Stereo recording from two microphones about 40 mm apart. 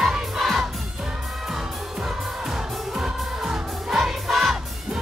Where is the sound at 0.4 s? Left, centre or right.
Centre.